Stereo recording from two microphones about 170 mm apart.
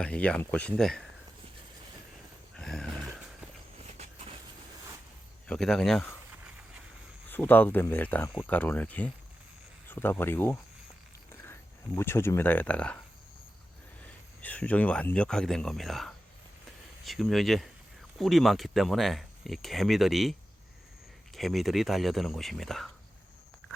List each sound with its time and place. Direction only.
0.0 s speech: 5° left (ahead or behind)
2.6 s a sound: 5° left (ahead or behind)
3.8 s vehicle: 40° right (ahead or behind)
5.5 s speech: 5° left (ahead or behind)
7.3 s speech: 10° left (ahead or behind)
14.0 s speech: 10° left (ahead or behind)
21.3 s speech: centre (ahead or behind)